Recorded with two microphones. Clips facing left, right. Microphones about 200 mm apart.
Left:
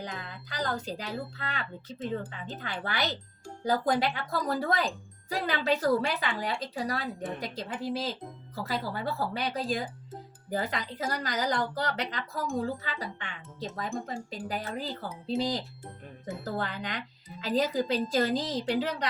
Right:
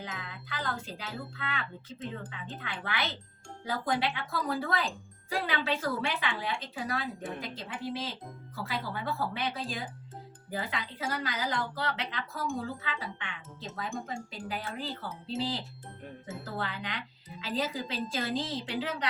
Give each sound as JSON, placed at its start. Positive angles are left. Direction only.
{"t": 0.0, "sound": "speech", "side_deg": 40}